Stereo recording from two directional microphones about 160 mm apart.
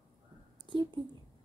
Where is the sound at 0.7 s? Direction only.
30° right (ahead or behind).